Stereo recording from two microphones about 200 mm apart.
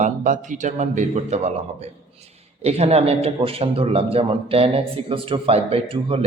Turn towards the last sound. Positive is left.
turn(degrees=-25)  # may be behind; listen again after turning